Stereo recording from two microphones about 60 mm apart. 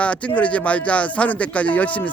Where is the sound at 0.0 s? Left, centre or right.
Left.